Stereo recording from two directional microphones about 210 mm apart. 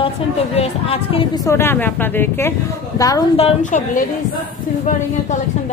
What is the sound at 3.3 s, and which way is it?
Speech, 35° left (ahead or behind).